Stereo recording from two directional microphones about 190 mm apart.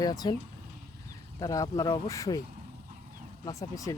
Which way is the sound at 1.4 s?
20° left (ahead or behind).